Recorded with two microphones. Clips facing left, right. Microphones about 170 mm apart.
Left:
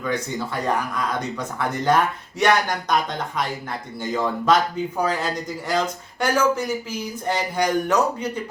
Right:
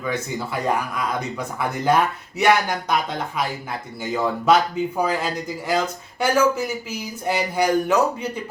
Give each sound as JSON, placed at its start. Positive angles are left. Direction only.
{"t": 0.0, "sound": "speech", "side_deg": -10}